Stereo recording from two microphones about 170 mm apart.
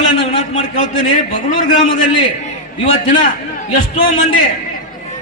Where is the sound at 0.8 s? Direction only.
50° left (ahead or behind).